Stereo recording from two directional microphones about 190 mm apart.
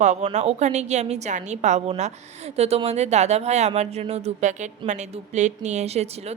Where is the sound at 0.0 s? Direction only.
40° right (ahead or behind).